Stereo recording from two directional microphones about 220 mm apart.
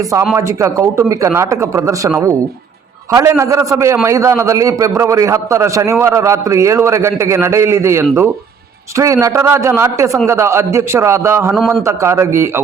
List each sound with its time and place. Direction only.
0.3 s a man's voice: 15° right (ahead or behind)